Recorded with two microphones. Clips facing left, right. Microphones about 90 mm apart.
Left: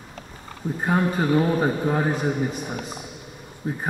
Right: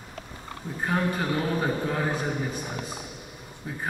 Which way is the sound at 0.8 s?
25° left (ahead or behind).